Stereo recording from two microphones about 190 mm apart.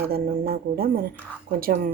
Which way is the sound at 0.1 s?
50° right (ahead or behind).